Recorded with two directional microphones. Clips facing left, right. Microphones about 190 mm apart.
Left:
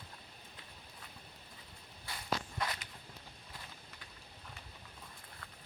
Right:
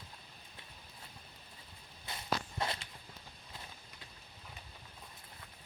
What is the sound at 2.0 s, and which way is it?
Walk, 25° right (ahead or behind).